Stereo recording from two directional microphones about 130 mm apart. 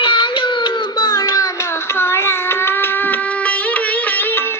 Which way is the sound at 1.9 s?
20° left (ahead or behind).